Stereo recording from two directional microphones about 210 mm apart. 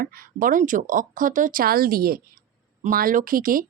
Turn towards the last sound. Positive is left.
turn(degrees=-40)  # may be behind; listen again after turning